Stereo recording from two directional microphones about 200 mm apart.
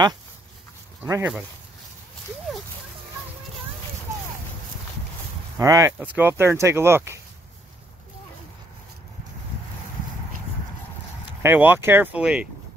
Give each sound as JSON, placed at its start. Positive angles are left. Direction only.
{"t": 1.0, "sound": "speech", "side_deg": -15}
{"t": 5.6, "sound": "speech", "side_deg": -15}
{"t": 11.4, "sound": "speech", "side_deg": -10}